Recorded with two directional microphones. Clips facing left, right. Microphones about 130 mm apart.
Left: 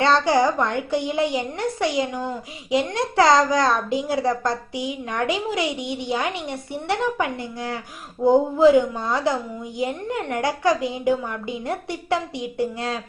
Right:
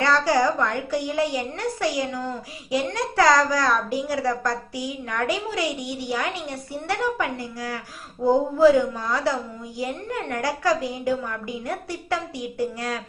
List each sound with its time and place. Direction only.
0.0 s a woman's voice: 25° left (ahead or behind)